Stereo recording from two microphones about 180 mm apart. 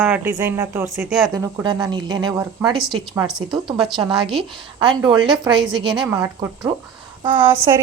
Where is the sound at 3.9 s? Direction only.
25° right (ahead or behind).